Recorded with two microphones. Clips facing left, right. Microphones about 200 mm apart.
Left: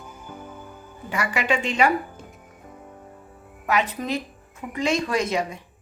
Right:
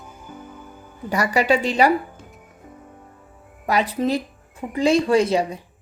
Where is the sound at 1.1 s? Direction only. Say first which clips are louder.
Right 6 dB; 40° right (ahead or behind).